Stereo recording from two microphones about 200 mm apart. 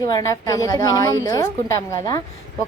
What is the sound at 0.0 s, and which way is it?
A woman's voice, 15° left (ahead or behind).